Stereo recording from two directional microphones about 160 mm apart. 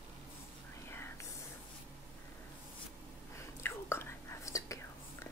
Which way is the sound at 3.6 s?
15° left (ahead or behind).